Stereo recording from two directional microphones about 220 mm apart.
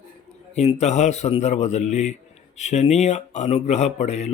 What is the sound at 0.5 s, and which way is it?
Speech, 30° left (ahead or behind).